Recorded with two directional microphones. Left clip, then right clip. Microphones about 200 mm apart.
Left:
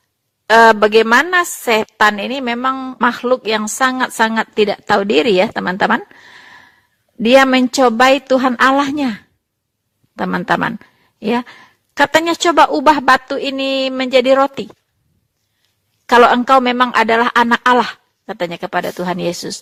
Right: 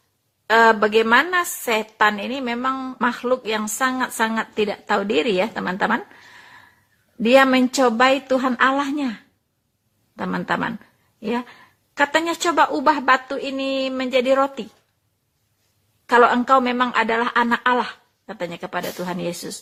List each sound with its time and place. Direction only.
0.4 s a sound: 45° left (ahead or behind)
1.1 s a woman's voice: 50° left (ahead or behind)
2.7 s speech: 30° left (ahead or behind)
3.0 s a woman's voice: 45° left (ahead or behind)
10.2 s a woman's voice: 45° left (ahead or behind)
16.0 s a woman's voice: 50° left (ahead or behind)